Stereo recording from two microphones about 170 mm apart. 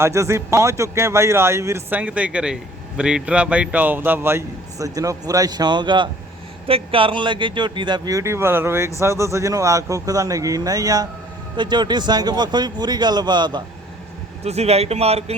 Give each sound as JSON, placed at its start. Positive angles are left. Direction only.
{"t": 0.0, "sound": "a man's voice", "side_deg": -15}
{"t": 14.4, "sound": "speech", "side_deg": -40}